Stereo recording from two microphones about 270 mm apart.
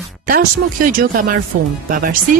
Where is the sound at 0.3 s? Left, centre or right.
Right.